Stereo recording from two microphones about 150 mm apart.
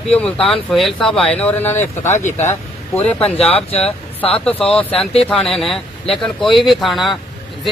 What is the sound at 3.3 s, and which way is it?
Speech, 40° left (ahead or behind).